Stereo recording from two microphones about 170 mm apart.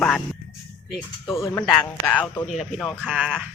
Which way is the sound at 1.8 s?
10° left (ahead or behind).